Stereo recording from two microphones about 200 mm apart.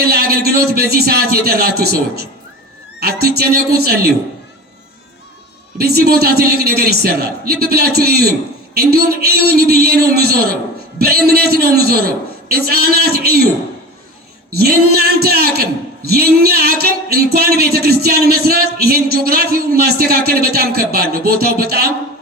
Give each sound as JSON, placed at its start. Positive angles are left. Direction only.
{"t": 0.1, "sound": "a man's voice", "side_deg": -50}
{"t": 5.7, "sound": "a man's voice", "side_deg": -50}
{"t": 14.5, "sound": "a man's voice", "side_deg": -50}